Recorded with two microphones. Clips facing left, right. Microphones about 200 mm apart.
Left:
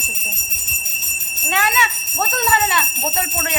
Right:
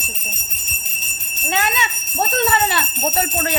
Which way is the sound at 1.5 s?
20° right (ahead or behind).